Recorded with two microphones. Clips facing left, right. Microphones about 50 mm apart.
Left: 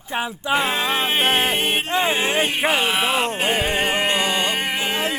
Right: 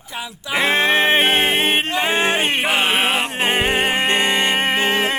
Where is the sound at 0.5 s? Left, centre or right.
Right.